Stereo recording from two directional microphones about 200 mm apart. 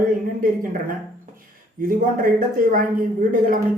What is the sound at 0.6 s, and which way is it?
A woman's voice, 45° right (ahead or behind).